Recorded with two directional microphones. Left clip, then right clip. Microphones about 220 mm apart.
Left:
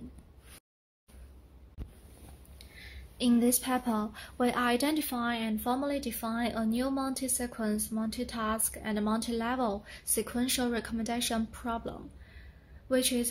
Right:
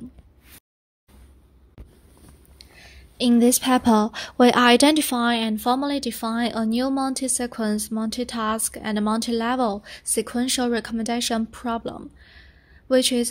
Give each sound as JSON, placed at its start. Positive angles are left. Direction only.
{"t": 2.6, "sound": "speech", "side_deg": -35}